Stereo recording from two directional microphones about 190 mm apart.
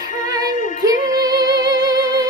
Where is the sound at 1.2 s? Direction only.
20° right (ahead or behind).